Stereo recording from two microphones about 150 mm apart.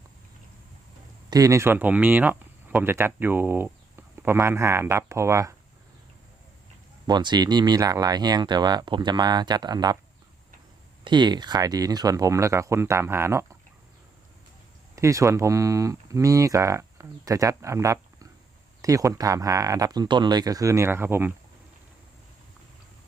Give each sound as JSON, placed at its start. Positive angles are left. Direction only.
{"t": 1.3, "sound": "speech", "side_deg": -20}
{"t": 7.1, "sound": "speech", "side_deg": -30}
{"t": 11.0, "sound": "speech", "side_deg": -30}
{"t": 14.9, "sound": "speech", "side_deg": -20}